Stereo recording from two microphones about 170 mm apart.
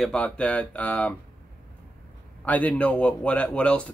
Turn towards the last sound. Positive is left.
turn(degrees=5)  # may be behind; listen again after turning